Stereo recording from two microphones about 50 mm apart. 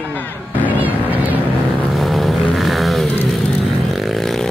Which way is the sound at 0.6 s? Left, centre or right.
Right.